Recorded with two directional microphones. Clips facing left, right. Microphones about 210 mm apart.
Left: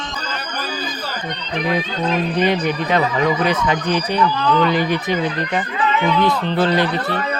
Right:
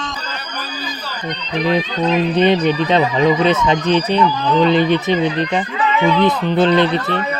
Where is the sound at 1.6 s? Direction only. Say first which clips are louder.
Right 4 dB; 25° right (ahead or behind).